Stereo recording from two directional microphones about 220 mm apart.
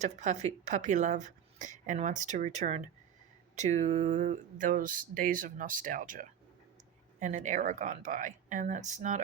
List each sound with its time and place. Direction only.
0.0 s speech: 30° right (ahead or behind)